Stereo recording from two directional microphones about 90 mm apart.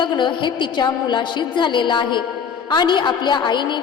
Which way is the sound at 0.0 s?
60° left (ahead or behind).